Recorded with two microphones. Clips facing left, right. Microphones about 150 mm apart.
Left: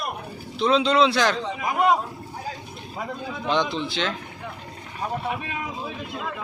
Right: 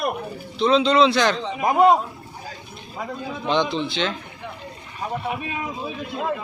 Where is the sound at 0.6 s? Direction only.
5° left (ahead or behind).